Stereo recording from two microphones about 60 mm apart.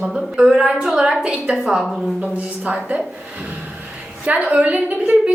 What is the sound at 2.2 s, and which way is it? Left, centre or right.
Speech, right.